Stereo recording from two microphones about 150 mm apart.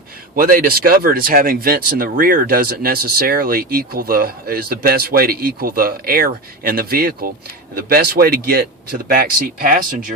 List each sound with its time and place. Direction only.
0.3 s speech: 75° right (ahead or behind); by 9.0 s 90° right
9.6 s speech: 70° right (ahead or behind)